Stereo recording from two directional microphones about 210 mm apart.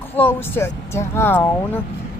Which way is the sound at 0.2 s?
10° left (ahead or behind).